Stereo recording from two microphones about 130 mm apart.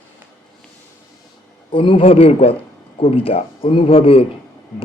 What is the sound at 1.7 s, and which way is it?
A man's voice, 40° left (ahead or behind).